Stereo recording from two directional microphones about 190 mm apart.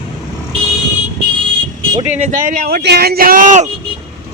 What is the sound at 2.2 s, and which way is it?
Speech, 45° right (ahead or behind).